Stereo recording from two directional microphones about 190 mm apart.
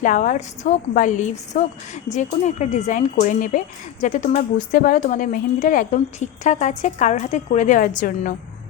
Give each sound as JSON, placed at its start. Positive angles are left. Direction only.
{"t": 0.0, "sound": "a woman's voice", "side_deg": 45}